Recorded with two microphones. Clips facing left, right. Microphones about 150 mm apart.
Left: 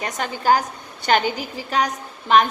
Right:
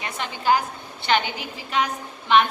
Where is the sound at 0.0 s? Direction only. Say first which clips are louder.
Left 3 dB; 40° left (ahead or behind).